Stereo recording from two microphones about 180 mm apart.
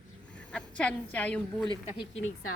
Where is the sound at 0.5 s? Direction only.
5° left (ahead or behind).